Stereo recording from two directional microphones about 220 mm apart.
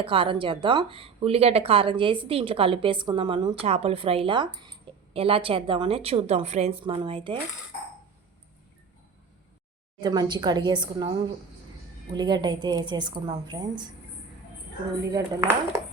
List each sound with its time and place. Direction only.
0.0 s speech: 25° right (ahead or behind)
10.0 s speech: 20° right (ahead or behind)
12.1 s speech: 20° right (ahead or behind)
15.1 s speech: 15° right (ahead or behind)